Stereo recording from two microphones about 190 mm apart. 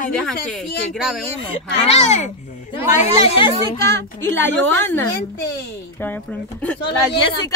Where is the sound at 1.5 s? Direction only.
35° left (ahead or behind).